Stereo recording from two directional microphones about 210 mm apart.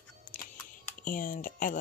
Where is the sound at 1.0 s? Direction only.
40° left (ahead or behind).